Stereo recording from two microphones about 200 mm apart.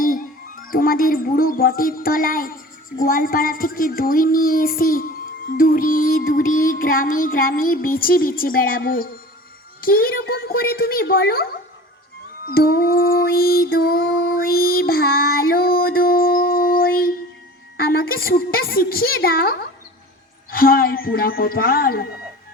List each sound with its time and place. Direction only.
0.0 s speech: 45° left (ahead or behind)
14.2 s child singing: 45° left (ahead or behind)
17.7 s speech: 50° left (ahead or behind)